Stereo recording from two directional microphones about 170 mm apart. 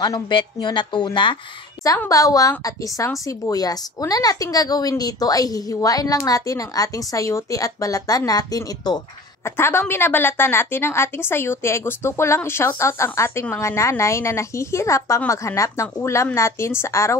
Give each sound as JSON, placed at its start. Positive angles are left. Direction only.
{"t": 0.0, "sound": "a woman's voice", "side_deg": 25}